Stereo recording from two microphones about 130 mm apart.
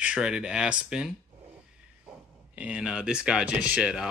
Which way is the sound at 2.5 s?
10° right (ahead or behind).